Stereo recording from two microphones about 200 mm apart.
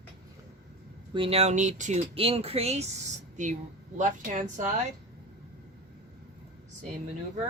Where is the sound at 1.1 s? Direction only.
25° right (ahead or behind).